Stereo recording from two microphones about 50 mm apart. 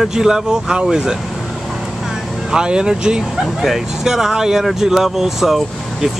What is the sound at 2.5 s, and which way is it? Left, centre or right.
Speech, centre.